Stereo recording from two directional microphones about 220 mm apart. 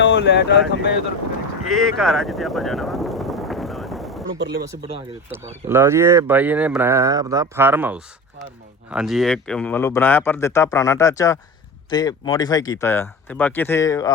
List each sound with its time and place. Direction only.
0.0 s speech: 50° left (ahead or behind)
1.7 s vehicle: centre (ahead or behind)
4.4 s speech: 50° right (ahead or behind)
5.3 s speech: 10° right (ahead or behind); by 14.1 s 15° left (ahead or behind)